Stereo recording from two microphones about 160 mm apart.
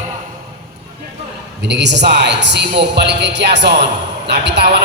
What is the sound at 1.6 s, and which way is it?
A woman's voice, 90° right.